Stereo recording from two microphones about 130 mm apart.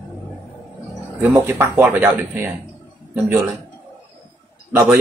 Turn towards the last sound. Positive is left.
turn(degrees=-15)  # may be behind; listen again after turning